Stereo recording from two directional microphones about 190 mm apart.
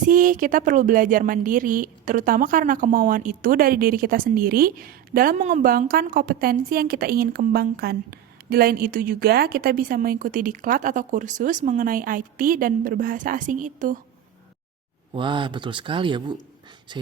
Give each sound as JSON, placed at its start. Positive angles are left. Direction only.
{"t": 0.0, "sound": "speech", "side_deg": -45}
{"t": 15.1, "sound": "speech", "side_deg": -25}